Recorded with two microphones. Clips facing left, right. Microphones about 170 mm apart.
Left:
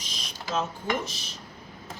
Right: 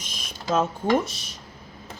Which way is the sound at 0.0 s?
50° right (ahead or behind).